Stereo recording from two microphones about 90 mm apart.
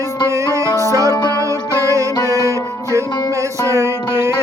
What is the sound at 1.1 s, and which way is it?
Music, 45° left (ahead or behind).